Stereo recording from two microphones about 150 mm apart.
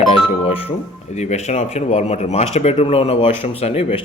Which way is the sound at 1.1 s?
50° left (ahead or behind).